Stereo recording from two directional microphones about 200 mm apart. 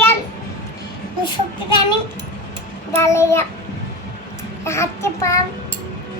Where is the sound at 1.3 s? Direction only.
20° left (ahead or behind).